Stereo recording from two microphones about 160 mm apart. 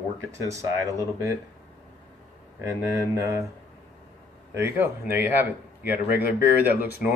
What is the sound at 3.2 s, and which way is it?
Speech, 20° right (ahead or behind).